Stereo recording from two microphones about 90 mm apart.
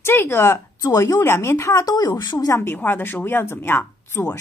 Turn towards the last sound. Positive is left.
turn(degrees=25)  # may be behind; listen again after turning